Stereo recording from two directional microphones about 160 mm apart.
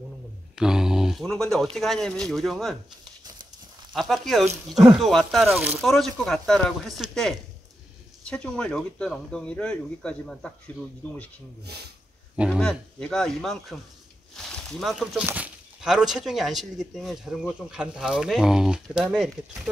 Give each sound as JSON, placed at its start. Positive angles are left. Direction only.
{"t": 0.6, "sound": "speech", "side_deg": -5}
{"t": 3.9, "sound": "speech", "side_deg": 0}
{"t": 11.6, "sound": "speech", "side_deg": -90}
{"t": 12.5, "sound": "speech", "side_deg": 5}